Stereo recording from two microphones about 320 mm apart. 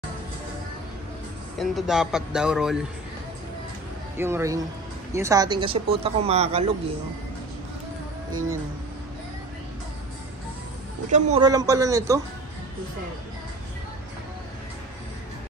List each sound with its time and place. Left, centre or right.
1.6 s speech: centre
4.2 s speech: centre
8.3 s speech: right
11.1 s speech: right